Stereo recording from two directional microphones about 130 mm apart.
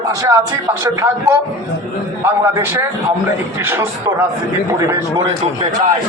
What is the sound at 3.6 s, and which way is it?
A man's voice, 15° right (ahead or behind).